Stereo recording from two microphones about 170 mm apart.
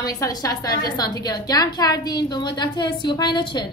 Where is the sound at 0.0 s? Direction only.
20° left (ahead or behind).